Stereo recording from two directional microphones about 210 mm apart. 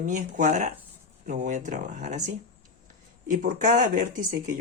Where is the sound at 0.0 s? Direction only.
35° right (ahead or behind).